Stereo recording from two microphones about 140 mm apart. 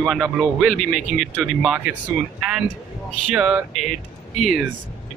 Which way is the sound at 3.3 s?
5° right (ahead or behind).